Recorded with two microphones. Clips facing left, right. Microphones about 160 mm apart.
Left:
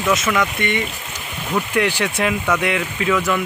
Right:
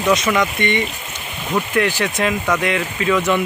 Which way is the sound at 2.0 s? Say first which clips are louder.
Right 1 dB; 10° left (ahead or behind).